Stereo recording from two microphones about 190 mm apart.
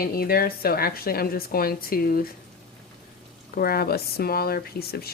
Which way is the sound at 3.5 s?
50° left (ahead or behind).